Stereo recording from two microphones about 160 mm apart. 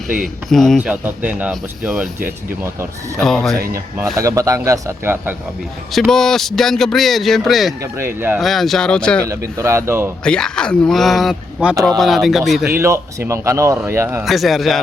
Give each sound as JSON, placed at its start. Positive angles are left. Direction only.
{"t": 0.5, "sound": "speech", "side_deg": 0}
{"t": 3.2, "sound": "speech", "side_deg": 0}
{"t": 4.2, "sound": "speech", "side_deg": -20}
{"t": 5.9, "sound": "speech", "side_deg": 5}
{"t": 7.9, "sound": "speech", "side_deg": -15}
{"t": 8.4, "sound": "speech", "side_deg": 0}
{"t": 9.2, "sound": "speech", "side_deg": -20}
{"t": 10.2, "sound": "speech", "side_deg": 5}
{"t": 12.7, "sound": "speech", "side_deg": -15}
{"t": 14.3, "sound": "speech", "side_deg": 0}